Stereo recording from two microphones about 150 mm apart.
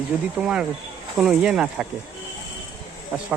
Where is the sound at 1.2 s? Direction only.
5° right (ahead or behind).